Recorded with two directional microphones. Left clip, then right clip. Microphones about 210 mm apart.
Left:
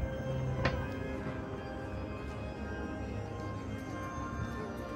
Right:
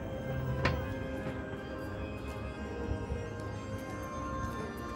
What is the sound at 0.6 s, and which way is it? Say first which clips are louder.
Music: right 1 dB; 35° right (ahead or behind).